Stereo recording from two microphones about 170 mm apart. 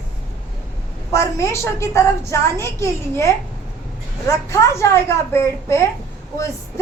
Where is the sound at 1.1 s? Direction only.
15° left (ahead or behind).